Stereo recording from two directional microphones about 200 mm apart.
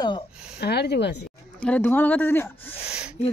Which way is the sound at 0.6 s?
55° left (ahead or behind).